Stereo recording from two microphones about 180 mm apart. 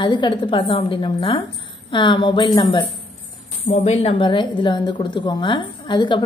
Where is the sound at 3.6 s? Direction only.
40° left (ahead or behind).